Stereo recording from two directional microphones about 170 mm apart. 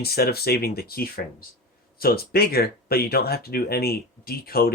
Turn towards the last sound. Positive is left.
turn(degrees=60)  # may be behind; listen again after turning